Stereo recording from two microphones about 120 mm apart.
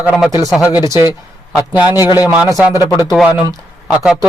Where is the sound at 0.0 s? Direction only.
10° right (ahead or behind).